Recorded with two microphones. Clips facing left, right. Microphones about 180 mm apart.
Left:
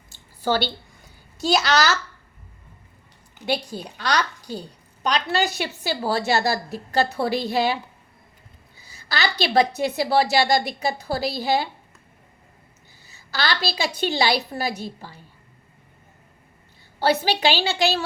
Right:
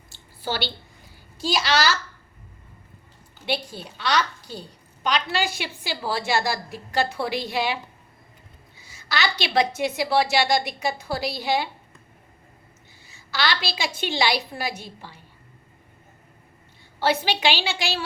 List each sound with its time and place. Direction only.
1.5 s a woman's voice: 45° left (ahead or behind)
3.4 s a woman's voice: 45° left (ahead or behind)
9.0 s a woman's voice: 35° left (ahead or behind)
13.1 s a woman's voice: 40° left (ahead or behind)
17.0 s a woman's voice: 40° left (ahead or behind)